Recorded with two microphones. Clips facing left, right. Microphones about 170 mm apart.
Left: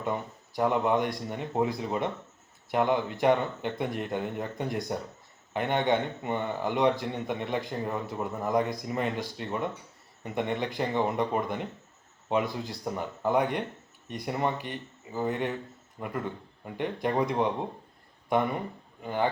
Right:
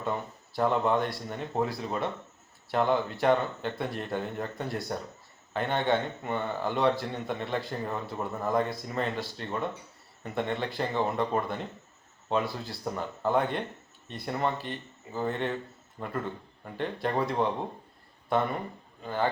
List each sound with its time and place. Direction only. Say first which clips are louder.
0.0 s speech: left 1 dB; 15° left (ahead or behind)